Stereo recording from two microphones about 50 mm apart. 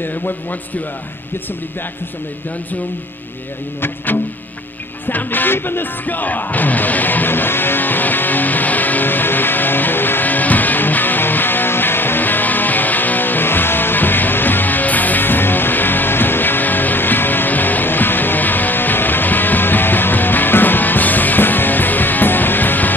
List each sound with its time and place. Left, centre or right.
0.0 s a man's voice: left
3.8 s a man's voice: left
5.0 s music: left